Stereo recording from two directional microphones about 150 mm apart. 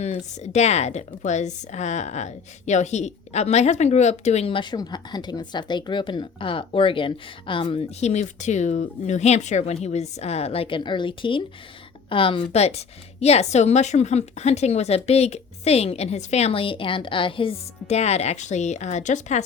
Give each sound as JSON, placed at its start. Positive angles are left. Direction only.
{"t": 0.0, "sound": "a woman's voice", "side_deg": 45}